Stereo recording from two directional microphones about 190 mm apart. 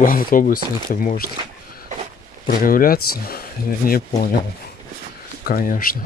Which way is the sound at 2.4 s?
45° left (ahead or behind).